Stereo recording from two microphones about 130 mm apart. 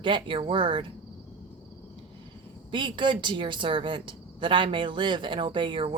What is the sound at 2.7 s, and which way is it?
Speech, 40° right (ahead or behind).